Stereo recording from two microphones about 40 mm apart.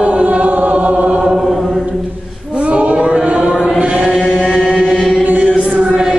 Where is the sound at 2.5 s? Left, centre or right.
Right.